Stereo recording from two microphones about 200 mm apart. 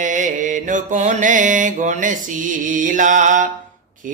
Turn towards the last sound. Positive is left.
turn(degrees=-40)  # may be behind; listen again after turning